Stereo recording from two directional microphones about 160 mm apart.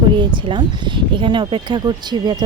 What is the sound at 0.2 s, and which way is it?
Speech, 30° right (ahead or behind).